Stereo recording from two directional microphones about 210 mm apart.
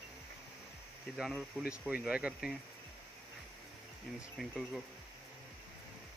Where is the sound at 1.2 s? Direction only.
Centre (ahead or behind).